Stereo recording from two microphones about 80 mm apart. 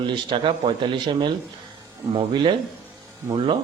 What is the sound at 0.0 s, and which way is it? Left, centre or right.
Speech, right.